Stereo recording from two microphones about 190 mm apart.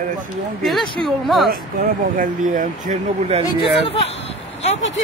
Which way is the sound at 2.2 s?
45° right (ahead or behind).